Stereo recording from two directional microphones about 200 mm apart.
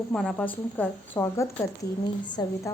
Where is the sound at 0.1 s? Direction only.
5° left (ahead or behind).